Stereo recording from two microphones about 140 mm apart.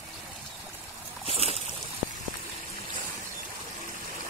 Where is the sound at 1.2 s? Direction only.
45° right (ahead or behind).